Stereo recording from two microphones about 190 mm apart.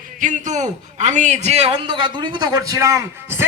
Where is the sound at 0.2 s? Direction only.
40° right (ahead or behind).